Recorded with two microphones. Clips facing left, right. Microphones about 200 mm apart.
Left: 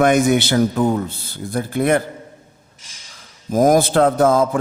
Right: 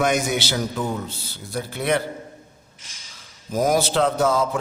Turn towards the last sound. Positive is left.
turn(degrees=50)  # may be behind; listen again after turning